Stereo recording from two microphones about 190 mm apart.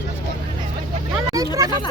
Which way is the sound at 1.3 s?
20° right (ahead or behind).